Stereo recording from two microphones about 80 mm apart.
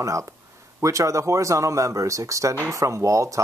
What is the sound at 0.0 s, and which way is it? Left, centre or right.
Speech, right.